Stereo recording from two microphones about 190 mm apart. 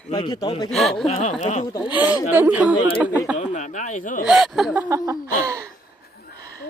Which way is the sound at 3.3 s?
40° left (ahead or behind).